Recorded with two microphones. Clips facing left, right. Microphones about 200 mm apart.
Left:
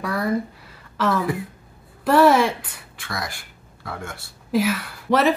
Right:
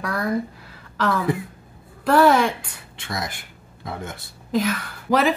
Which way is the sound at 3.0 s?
20° right (ahead or behind).